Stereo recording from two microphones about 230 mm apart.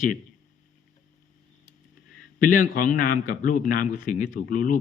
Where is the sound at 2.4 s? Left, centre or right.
Left.